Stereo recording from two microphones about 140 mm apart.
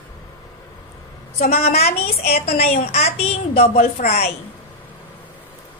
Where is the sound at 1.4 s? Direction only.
90° left.